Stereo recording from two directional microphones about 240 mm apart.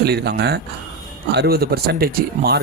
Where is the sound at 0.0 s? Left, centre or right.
Right.